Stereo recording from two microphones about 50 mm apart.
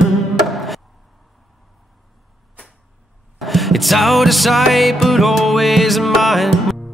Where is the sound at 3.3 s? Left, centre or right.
Centre.